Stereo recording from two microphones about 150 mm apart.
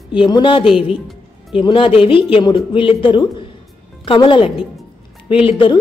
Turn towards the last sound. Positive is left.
turn(degrees=35)  # may be behind; listen again after turning